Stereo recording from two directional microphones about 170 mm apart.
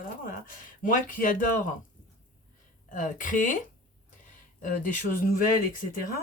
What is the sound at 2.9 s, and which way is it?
Speech, 50° left (ahead or behind).